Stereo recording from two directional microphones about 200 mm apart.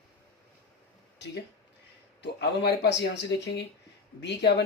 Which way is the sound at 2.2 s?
55° left (ahead or behind).